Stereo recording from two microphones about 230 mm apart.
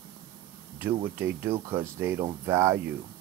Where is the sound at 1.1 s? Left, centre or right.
Centre.